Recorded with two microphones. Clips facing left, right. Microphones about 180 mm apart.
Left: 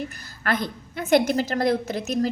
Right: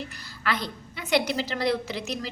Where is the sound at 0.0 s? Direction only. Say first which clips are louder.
Left 2 dB; 45° left (ahead or behind).